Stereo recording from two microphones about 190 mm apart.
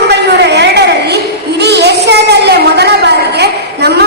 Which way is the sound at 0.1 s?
60° right (ahead or behind).